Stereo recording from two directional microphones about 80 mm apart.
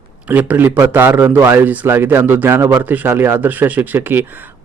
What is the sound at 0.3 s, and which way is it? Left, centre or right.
Speech, right.